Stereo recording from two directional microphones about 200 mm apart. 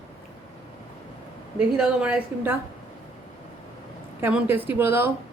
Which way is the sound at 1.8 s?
5° right (ahead or behind).